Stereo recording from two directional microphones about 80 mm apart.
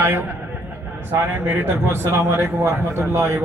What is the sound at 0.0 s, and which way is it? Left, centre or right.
A man's voice, right.